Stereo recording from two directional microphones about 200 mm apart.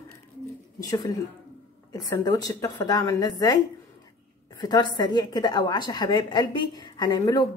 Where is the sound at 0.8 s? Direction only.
20° left (ahead or behind).